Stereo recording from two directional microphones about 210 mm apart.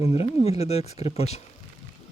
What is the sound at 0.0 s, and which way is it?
Speech, 30° left (ahead or behind).